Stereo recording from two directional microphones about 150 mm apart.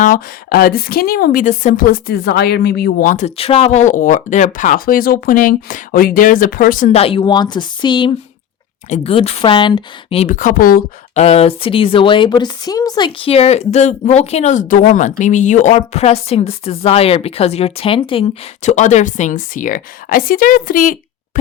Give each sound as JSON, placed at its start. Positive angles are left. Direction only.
{"t": 0.0, "sound": "a woman's voice", "side_deg": 75}
{"t": 8.9, "sound": "a woman's voice", "side_deg": 40}
{"t": 10.2, "sound": "speech", "side_deg": 60}
{"t": 11.1, "sound": "a woman's voice", "side_deg": 45}
{"t": 13.2, "sound": "speech", "side_deg": 40}